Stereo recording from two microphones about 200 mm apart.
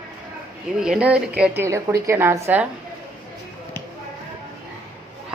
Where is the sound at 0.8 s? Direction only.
5° right (ahead or behind).